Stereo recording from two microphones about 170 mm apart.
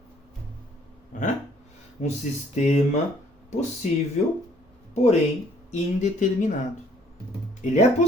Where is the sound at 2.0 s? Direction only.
45° left (ahead or behind).